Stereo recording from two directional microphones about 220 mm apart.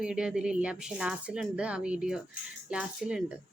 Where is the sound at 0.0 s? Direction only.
5° right (ahead or behind).